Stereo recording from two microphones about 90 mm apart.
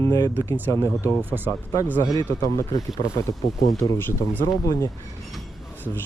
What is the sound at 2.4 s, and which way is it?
Mantra, 40° left (ahead or behind).